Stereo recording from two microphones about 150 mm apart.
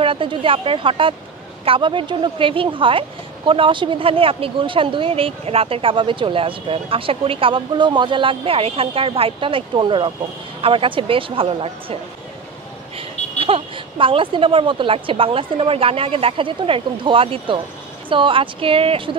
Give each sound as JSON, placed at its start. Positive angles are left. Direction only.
{"t": 0.0, "sound": "speech", "side_deg": -35}
{"t": 13.4, "sound": "speech", "side_deg": -35}